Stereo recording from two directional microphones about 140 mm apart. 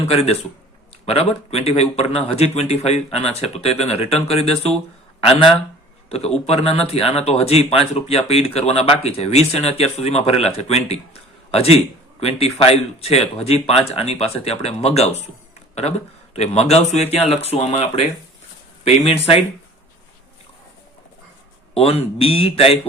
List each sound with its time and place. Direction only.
0.0 s speech: 45° left (ahead or behind)
6.1 s speech: 45° left (ahead or behind)
21.8 s speech: 45° left (ahead or behind)